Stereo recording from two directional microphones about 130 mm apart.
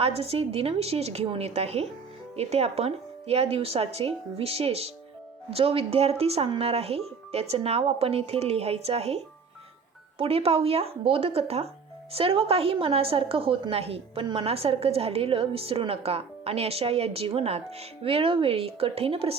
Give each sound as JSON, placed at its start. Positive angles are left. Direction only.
{"t": 0.0, "sound": "a woman's voice", "side_deg": -50}